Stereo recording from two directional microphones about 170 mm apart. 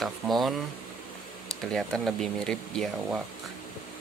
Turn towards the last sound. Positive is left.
turn(degrees=0)  # may be behind; listen again after turning